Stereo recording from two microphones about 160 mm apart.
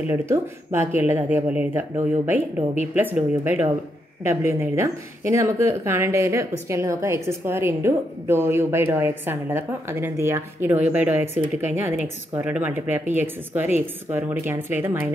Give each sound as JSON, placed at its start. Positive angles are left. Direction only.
{"t": 0.1, "sound": "speech", "side_deg": -15}